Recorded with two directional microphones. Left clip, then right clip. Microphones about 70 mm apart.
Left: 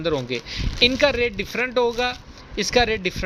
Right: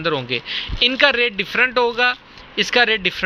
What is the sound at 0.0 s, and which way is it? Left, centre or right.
A man's voice, left.